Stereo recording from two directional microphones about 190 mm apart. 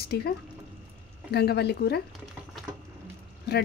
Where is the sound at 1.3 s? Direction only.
60° left (ahead or behind).